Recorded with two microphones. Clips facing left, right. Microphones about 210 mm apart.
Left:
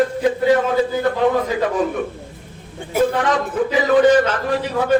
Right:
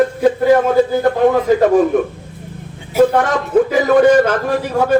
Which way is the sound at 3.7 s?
50° right (ahead or behind).